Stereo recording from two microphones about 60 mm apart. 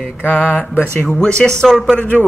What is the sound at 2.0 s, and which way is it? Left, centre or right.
Mantra, left.